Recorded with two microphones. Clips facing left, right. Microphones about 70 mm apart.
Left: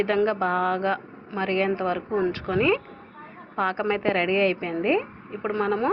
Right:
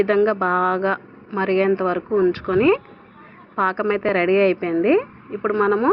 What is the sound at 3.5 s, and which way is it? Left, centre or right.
A woman's voice, right.